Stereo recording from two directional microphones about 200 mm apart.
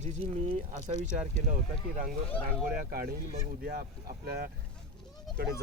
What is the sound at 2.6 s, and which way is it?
Speech, 50° right (ahead or behind).